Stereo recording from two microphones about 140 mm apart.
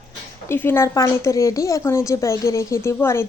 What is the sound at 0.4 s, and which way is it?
Speech, 15° left (ahead or behind).